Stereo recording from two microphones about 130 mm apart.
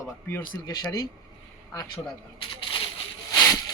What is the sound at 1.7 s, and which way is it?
Speech, 35° left (ahead or behind).